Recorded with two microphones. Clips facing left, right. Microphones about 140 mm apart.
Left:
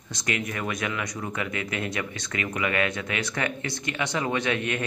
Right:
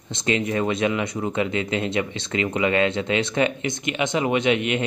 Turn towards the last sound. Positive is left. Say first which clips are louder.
# right 6 dB
turn(degrees=-20)  # may be behind; listen again after turning